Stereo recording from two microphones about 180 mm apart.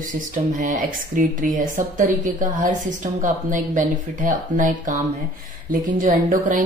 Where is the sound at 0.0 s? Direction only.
45° right (ahead or behind).